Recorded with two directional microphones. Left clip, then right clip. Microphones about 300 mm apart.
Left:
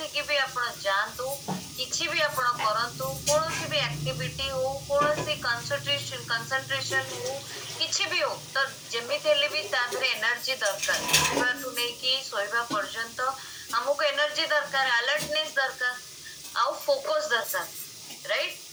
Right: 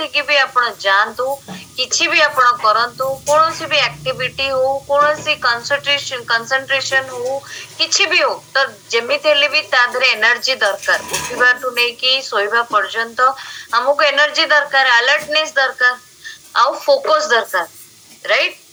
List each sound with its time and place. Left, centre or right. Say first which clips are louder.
0.0 s speech: right 13 dB; right